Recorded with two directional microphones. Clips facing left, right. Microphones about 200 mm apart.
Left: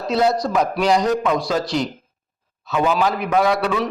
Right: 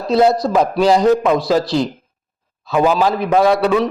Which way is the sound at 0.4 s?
30° right (ahead or behind).